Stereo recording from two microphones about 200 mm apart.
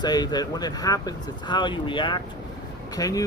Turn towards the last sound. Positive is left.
turn(degrees=15)  # may be behind; listen again after turning